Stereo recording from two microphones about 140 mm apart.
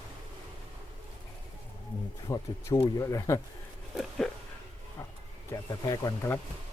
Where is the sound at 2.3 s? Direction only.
25° left (ahead or behind).